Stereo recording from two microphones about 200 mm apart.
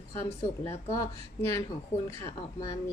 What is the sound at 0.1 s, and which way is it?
Speech, 15° left (ahead or behind).